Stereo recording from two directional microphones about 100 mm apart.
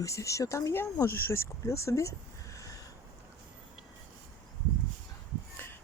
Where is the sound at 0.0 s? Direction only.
30° left (ahead or behind).